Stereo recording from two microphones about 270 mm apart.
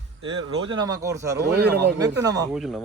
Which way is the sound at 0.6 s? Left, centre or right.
Centre.